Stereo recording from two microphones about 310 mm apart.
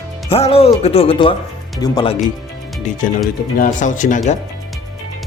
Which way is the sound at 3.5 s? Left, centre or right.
Left.